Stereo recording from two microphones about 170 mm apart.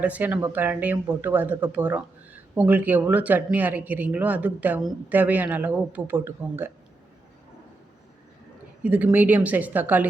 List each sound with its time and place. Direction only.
0.0 s speech: 10° right (ahead or behind)
8.8 s speech: 10° right (ahead or behind)